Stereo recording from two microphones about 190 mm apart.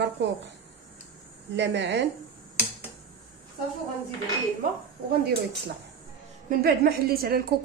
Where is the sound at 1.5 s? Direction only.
65° right (ahead or behind).